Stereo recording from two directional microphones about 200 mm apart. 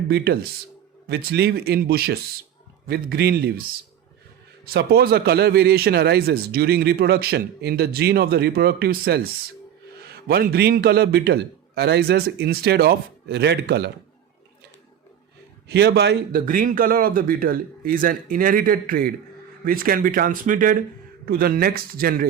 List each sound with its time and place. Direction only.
1.0 s speech: 55° right (ahead or behind)
4.7 s speech: 50° right (ahead or behind)
15.7 s speech: 55° right (ahead or behind)